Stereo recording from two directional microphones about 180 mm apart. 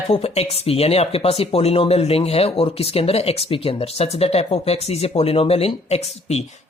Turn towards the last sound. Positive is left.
turn(degrees=35)  # may be behind; listen again after turning